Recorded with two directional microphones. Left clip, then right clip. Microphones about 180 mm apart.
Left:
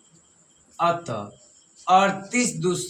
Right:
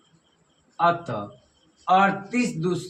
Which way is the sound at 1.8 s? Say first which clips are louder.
Left 1 dB; 20° left (ahead or behind).